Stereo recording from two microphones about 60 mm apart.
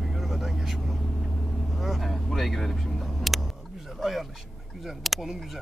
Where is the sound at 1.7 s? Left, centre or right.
Centre.